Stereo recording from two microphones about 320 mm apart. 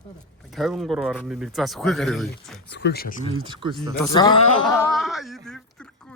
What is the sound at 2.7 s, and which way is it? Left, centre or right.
Speech, left.